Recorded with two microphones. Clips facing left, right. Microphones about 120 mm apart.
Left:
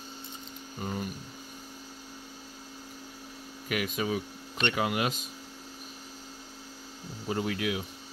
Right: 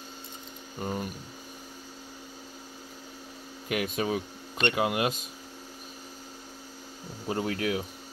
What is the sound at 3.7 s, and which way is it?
Speech, 35° right (ahead or behind).